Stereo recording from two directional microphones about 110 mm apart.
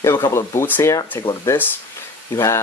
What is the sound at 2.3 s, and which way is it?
Speech, 25° left (ahead or behind).